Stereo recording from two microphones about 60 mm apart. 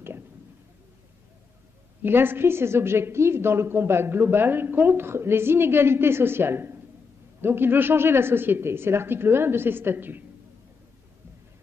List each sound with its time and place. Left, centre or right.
2.0 s a woman's voice: right